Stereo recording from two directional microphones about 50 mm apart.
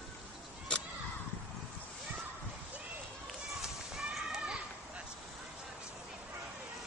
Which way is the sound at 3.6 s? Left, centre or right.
Centre.